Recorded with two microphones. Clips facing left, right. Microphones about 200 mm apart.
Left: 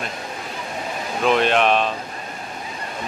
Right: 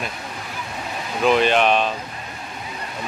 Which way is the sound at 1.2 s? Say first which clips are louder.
Right 1 dB; centre (ahead or behind).